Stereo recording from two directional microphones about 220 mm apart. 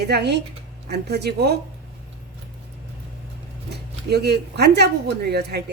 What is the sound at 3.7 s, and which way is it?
Speech, 50° right (ahead or behind).